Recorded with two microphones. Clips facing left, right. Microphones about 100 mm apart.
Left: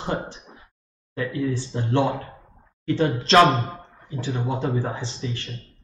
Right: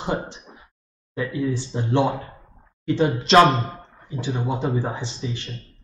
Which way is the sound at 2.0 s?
Centre (ahead or behind).